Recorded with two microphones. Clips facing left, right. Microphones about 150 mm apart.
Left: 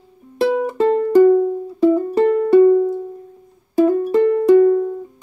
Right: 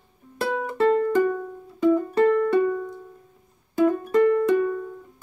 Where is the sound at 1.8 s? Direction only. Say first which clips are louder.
Left 4 dB; 30° left (ahead or behind).